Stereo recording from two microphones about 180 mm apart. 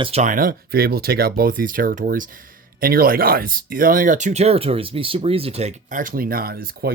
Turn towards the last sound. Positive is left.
turn(degrees=-55)  # may be behind; listen again after turning